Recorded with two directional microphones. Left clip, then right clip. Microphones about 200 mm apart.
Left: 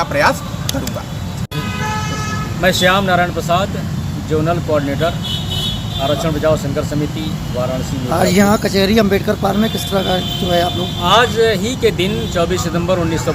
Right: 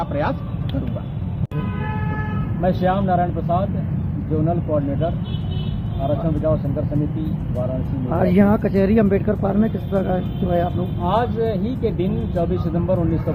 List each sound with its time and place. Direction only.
0.0 s speech: 20° left (ahead or behind)
2.6 s speech: 45° left (ahead or behind)
6.2 s speech: 40° left (ahead or behind)
8.1 s speech: 15° left (ahead or behind)
11.0 s speech: 40° left (ahead or behind)